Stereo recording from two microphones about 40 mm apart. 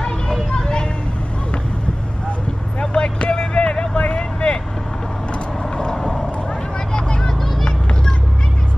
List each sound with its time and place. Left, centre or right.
0.0 s music: left
2.8 s vehicle: left
5.9 s vehicle: centre